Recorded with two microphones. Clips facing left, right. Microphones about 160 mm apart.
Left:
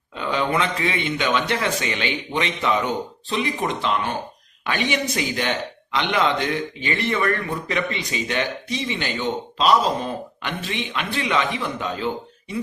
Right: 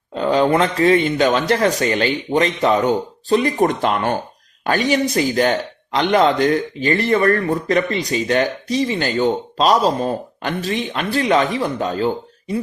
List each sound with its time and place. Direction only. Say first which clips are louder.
0.1 s speech: right 8 dB; 40° right (ahead or behind)